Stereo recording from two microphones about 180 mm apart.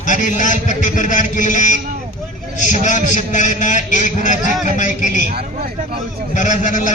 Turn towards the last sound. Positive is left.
turn(degrees=45)  # may be behind; listen again after turning